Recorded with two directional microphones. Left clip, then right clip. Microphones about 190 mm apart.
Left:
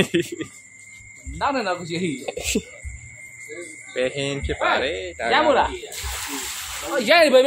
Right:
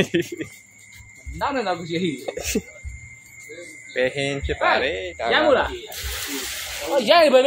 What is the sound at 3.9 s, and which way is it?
Speech, 5° right (ahead or behind).